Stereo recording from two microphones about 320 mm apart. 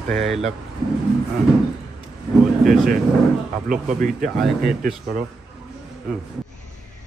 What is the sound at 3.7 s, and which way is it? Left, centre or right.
Speech, right.